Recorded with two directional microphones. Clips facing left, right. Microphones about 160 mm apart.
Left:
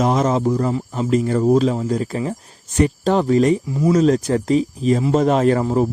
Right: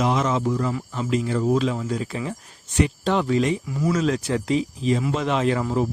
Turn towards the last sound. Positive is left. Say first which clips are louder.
# left 6 dB
turn(degrees=40)  # may be behind; listen again after turning